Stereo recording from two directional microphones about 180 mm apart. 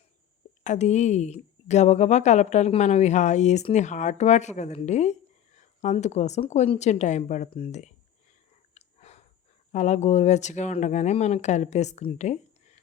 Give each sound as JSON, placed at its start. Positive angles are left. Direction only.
{"t": 0.6, "sound": "a woman's voice", "side_deg": 40}
{"t": 8.7, "sound": "whispering", "side_deg": 35}
{"t": 9.7, "sound": "a woman's voice", "side_deg": 40}